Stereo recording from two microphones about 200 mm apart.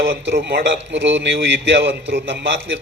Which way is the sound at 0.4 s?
60° right (ahead or behind).